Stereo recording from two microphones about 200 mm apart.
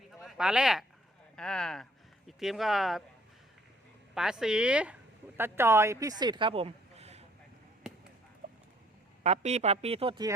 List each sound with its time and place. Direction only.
0.2 s speech: centre (ahead or behind)
4.1 s speech: 5° right (ahead or behind); by 7.3 s 30° right (ahead or behind)
9.2 s speech: 35° right (ahead or behind)